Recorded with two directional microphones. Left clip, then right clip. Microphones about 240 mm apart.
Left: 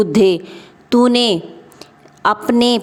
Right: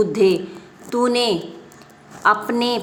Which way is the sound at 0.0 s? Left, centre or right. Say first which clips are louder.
Left 3 dB; left.